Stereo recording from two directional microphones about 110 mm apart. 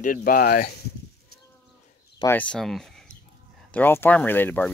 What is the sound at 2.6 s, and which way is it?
Speech, 5° left (ahead or behind).